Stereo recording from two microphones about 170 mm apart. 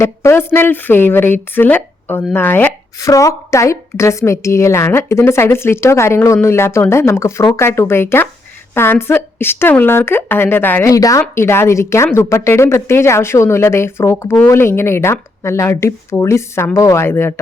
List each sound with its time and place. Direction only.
0.0 s a woman's voice: 15° left (ahead or behind)